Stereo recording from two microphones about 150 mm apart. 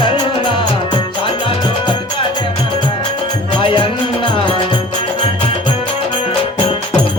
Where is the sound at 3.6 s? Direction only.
35° left (ahead or behind).